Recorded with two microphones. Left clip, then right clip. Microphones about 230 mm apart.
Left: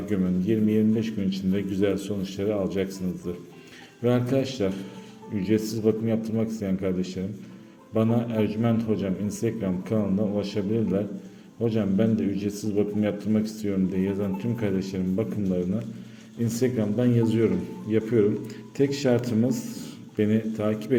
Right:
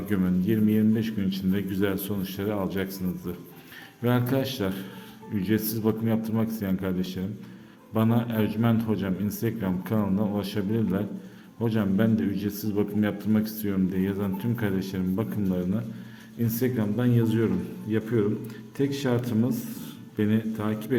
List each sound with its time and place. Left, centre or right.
0.1 s a man's voice: centre